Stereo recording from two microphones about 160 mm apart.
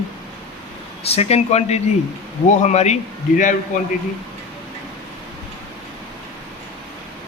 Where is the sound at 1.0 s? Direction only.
40° left (ahead or behind).